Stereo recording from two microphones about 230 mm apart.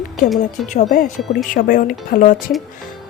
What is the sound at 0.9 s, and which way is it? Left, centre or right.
A woman's voice, left.